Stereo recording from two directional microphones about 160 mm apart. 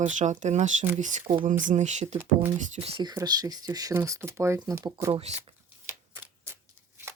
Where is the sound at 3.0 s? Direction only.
25° right (ahead or behind).